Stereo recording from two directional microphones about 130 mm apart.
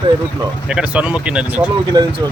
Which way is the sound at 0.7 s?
10° right (ahead or behind).